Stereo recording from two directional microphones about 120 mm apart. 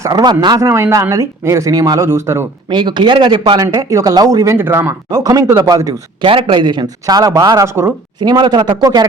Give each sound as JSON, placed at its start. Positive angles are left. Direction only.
{"t": 0.0, "sound": "speech", "side_deg": -35}
{"t": 2.6, "sound": "a man's voice", "side_deg": -40}
{"t": 4.5, "sound": "speech", "side_deg": -20}
{"t": 5.0, "sound": "a man's voice", "side_deg": -35}
{"t": 6.2, "sound": "a man's voice", "side_deg": -45}
{"t": 8.2, "sound": "a man's voice", "side_deg": -35}